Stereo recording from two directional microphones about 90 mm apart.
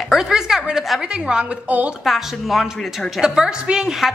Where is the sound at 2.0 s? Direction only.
Centre (ahead or behind).